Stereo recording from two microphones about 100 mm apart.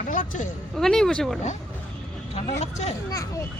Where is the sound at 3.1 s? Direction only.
35° left (ahead or behind).